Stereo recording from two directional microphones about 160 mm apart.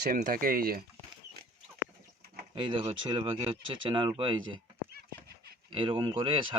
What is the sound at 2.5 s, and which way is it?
Speech, 30° right (ahead or behind).